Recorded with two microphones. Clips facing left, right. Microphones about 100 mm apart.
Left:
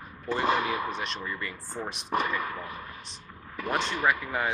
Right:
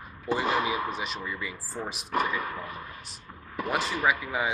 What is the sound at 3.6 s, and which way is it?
Speech, 5° right (ahead or behind).